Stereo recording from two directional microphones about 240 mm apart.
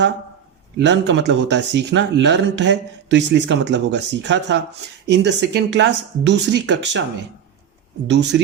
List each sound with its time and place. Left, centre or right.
0.8 s speech: right
8.0 s speech: right